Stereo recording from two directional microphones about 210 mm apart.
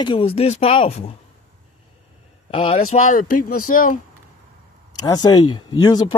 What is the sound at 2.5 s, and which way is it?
Speech, 30° left (ahead or behind).